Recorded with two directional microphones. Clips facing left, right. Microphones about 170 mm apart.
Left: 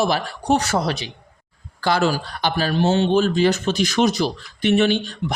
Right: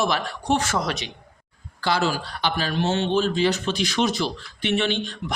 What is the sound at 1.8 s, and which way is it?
A man's voice, 50° left (ahead or behind).